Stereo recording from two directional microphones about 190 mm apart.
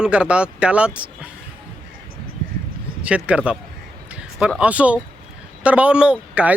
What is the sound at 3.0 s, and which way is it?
A man's voice, 5° right (ahead or behind).